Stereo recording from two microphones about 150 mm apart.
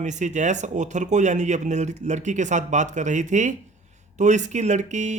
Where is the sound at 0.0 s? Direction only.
55° right (ahead or behind).